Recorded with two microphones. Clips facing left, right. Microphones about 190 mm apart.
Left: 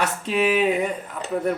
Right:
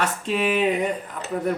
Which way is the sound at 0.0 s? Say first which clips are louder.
Left 1 dB; 5° left (ahead or behind).